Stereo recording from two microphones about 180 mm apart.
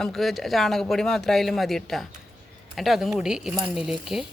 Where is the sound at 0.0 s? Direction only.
Centre (ahead or behind).